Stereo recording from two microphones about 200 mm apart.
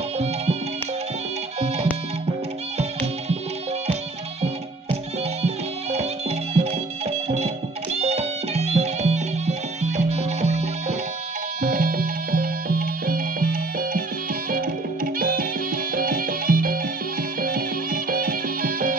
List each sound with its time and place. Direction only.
5.4 s music: 30° right (ahead or behind)
15.1 s music: 45° right (ahead or behind)